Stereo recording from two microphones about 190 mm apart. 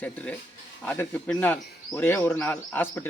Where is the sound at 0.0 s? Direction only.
5° left (ahead or behind).